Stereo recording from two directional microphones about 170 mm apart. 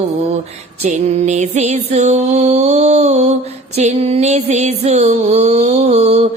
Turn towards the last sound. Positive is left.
turn(degrees=-40)  # may be behind; listen again after turning